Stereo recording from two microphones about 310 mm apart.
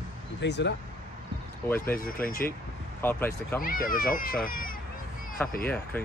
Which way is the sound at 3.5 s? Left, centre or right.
Left.